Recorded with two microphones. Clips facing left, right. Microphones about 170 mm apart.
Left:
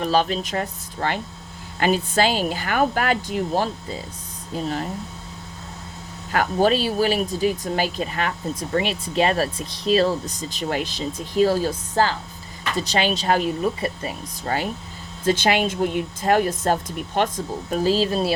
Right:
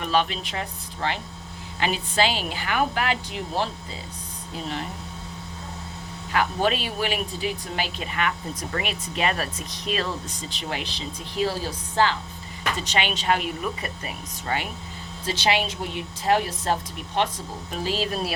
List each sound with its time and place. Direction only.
0.0 s speech: 35° left (ahead or behind)
6.3 s speech: 40° left (ahead or behind)
15.2 s speech: 50° left (ahead or behind); by 18.3 s 30° left (ahead or behind)